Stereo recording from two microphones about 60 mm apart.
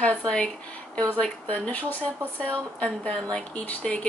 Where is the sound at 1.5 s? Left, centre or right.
Left.